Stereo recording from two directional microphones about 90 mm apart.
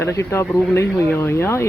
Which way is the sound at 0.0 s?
30° left (ahead or behind).